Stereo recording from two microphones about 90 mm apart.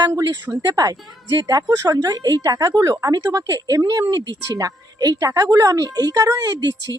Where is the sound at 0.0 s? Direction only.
45° right (ahead or behind).